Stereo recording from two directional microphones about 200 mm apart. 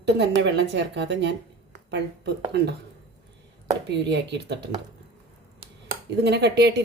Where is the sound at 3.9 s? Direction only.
60° right (ahead or behind).